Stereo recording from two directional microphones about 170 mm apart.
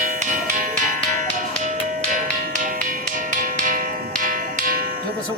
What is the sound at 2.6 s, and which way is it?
Music, 50° right (ahead or behind).